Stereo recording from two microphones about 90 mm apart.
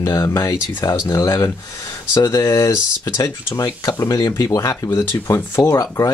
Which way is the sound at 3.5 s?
45° left (ahead or behind).